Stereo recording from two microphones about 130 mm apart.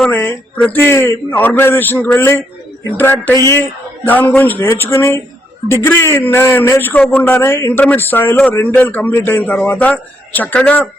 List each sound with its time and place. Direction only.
0.1 s a man's voice: 15° left (ahead or behind)